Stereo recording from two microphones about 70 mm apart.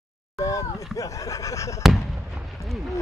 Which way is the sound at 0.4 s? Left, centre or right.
Left.